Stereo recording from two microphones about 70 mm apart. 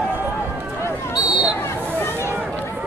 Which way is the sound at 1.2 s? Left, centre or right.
Centre.